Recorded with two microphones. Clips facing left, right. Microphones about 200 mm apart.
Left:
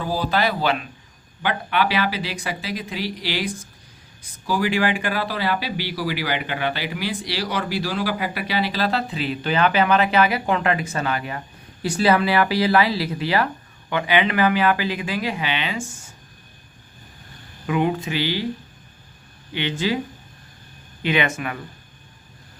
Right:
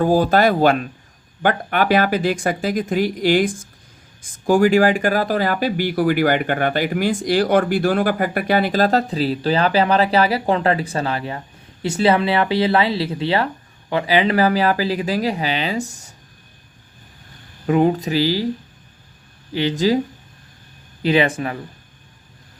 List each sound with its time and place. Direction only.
0.0 s speech: 50° right (ahead or behind)
17.7 s speech: 40° right (ahead or behind)
19.5 s speech: 40° right (ahead or behind)
21.0 s speech: 35° right (ahead or behind)